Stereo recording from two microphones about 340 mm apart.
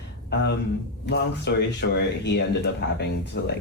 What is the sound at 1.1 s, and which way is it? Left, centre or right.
Speech, left.